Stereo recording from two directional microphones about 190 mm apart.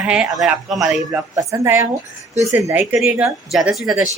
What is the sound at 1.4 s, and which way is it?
Speech, 15° right (ahead or behind).